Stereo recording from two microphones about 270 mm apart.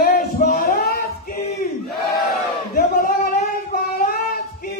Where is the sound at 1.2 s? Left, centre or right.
Left.